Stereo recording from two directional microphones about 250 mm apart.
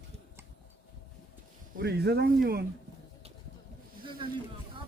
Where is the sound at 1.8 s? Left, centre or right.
Right.